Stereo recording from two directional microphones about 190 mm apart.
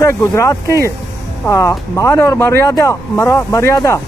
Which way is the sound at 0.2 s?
15° left (ahead or behind).